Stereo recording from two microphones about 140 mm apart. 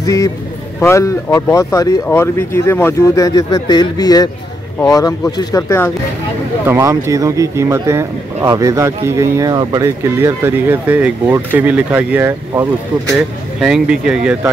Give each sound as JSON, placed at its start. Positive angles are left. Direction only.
{"t": 0.0, "sound": "a man's voice", "side_deg": 25}
{"t": 6.6, "sound": "speech", "side_deg": -20}
{"t": 13.6, "sound": "speech", "side_deg": -5}